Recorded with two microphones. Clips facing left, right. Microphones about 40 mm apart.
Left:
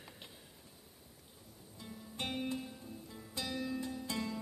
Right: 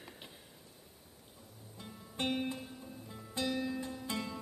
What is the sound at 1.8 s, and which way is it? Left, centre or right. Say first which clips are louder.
Music: right 4 dB; right.